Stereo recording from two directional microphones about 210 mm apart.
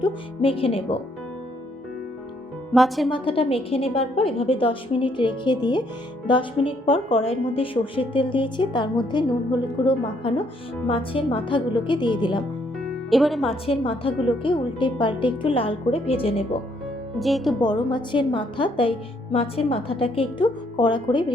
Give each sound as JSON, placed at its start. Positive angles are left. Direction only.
{"t": 0.0, "sound": "speech", "side_deg": 25}
{"t": 2.7, "sound": "speech", "side_deg": 0}
{"t": 3.1, "sound": "speech", "side_deg": 25}
{"t": 12.8, "sound": "music", "side_deg": 0}
{"t": 13.5, "sound": "speech", "side_deg": 25}
{"t": 17.2, "sound": "speech", "side_deg": 0}
{"t": 17.6, "sound": "speech", "side_deg": 20}